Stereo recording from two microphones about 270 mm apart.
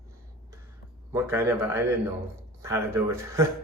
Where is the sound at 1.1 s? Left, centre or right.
Centre.